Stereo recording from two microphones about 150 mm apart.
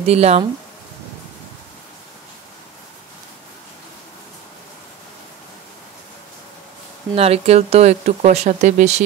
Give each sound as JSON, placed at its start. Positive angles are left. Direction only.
{"t": 0.0, "sound": "speech", "side_deg": -45}
{"t": 7.2, "sound": "speech", "side_deg": -45}